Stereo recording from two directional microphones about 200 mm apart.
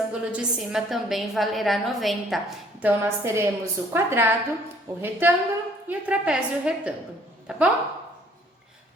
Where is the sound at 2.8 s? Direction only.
15° right (ahead or behind).